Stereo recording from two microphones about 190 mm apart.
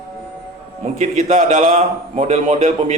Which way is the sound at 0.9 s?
40° right (ahead or behind).